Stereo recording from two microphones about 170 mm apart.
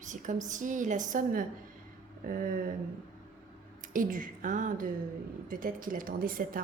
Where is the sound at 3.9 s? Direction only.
50° right (ahead or behind).